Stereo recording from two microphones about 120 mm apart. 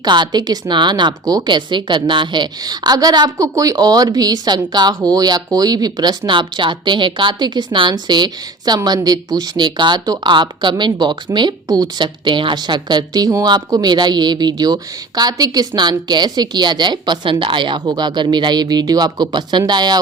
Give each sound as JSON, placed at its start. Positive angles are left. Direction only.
{"t": 0.0, "sound": "a woman's voice", "side_deg": -35}